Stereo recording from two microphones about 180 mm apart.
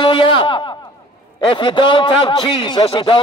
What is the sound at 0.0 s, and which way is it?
A man's voice, 25° left (ahead or behind).